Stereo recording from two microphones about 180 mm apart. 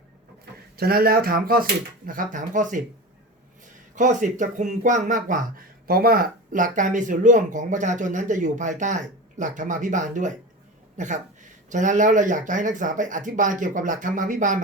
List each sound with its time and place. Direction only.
0.8 s speech: 55° right (ahead or behind)
3.9 s speech: 45° right (ahead or behind)